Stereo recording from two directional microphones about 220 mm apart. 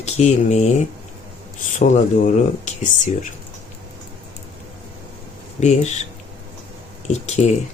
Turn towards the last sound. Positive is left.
turn(degrees=30)  # may be behind; listen again after turning